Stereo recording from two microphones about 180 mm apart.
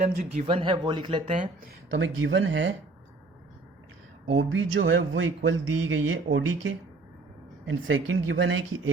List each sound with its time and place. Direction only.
0.0 s speech: 45° right (ahead or behind)
0.4 s speech: 30° right (ahead or behind)
1.9 s speech: 90° right
4.3 s speech: 90° right